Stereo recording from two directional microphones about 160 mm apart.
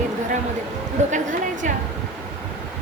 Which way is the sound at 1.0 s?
45° right (ahead or behind).